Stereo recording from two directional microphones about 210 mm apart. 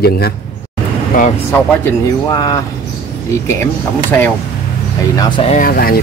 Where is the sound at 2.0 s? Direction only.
15° left (ahead or behind).